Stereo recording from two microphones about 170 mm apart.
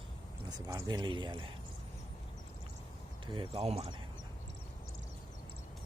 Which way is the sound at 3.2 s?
30° right (ahead or behind).